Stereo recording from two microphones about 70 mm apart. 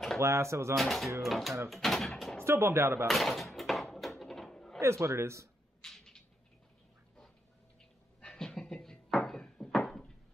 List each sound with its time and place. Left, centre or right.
0.2 s speech: right
0.7 s speech: centre
2.4 s a man's voice: right
3.1 s door: centre
4.7 s a man's voice: right
5.8 s a sound: centre
8.3 s a sound: centre